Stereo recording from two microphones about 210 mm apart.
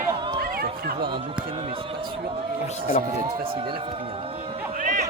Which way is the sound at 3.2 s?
45° right (ahead or behind).